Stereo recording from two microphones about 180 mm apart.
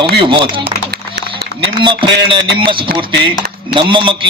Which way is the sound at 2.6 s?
25° right (ahead or behind).